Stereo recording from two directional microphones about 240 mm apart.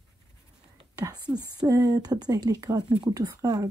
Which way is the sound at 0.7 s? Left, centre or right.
Centre.